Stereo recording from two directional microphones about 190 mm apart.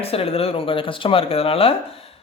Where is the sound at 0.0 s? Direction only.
30° left (ahead or behind).